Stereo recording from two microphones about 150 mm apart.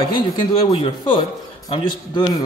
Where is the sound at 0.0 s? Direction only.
35° left (ahead or behind).